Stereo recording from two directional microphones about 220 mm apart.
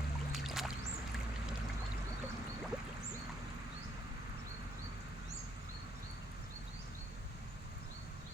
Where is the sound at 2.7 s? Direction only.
5° right (ahead or behind).